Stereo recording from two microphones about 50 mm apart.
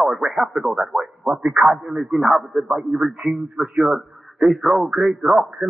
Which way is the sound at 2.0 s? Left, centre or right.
Centre.